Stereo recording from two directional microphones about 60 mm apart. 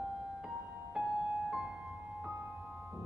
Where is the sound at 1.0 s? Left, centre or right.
Centre.